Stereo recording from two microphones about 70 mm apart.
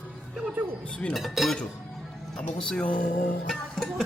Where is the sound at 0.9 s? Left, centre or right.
Centre.